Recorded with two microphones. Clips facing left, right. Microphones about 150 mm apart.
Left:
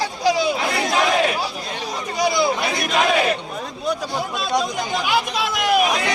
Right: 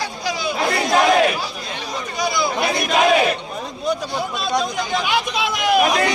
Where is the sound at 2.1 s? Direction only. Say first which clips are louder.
Left 3 dB; 30° left (ahead or behind).